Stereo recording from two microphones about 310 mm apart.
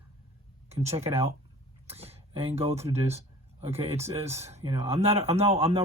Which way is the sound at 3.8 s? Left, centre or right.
Centre.